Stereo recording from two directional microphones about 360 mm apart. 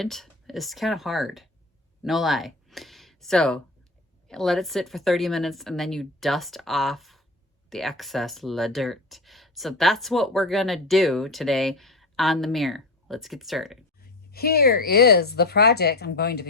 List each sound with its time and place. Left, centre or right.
0.0 s speech: centre
14.3 s a woman's voice: left